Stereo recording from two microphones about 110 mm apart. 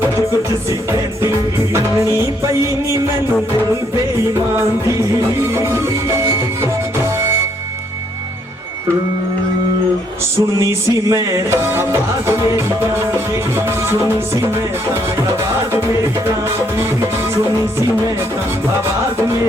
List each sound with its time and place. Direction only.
0.7 s music: 25° right (ahead or behind)
5.5 s music: 25° right (ahead or behind)
10.6 s a sound: 30° right (ahead or behind)
11.5 s music: 25° right (ahead or behind)
13.1 s music: 25° right (ahead or behind)